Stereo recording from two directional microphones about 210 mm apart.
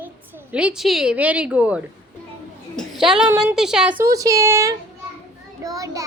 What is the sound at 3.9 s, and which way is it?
A woman's voice, 15° right (ahead or behind).